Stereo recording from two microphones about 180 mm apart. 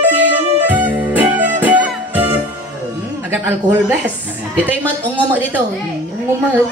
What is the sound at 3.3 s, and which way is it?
Speech, 10° right (ahead or behind).